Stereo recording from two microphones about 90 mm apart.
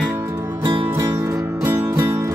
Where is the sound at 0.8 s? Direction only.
30° right (ahead or behind).